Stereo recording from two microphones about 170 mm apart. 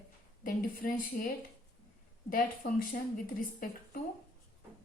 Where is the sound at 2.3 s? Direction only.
55° left (ahead or behind).